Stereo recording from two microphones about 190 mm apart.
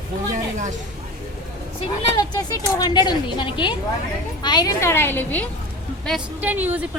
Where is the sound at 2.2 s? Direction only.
20° left (ahead or behind).